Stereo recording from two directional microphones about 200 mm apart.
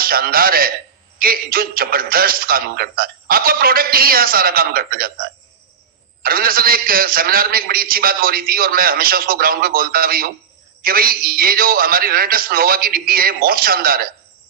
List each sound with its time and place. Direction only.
0.0 s a man's voice: 45° right (ahead or behind)